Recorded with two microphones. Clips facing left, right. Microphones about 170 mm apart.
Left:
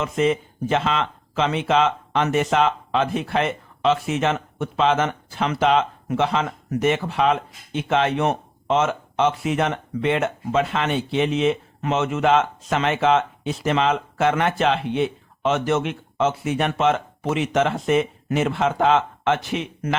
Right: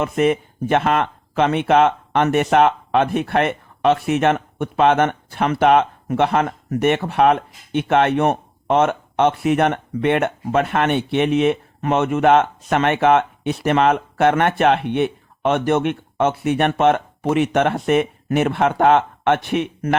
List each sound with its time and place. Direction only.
0.0 s speech: 60° right (ahead or behind)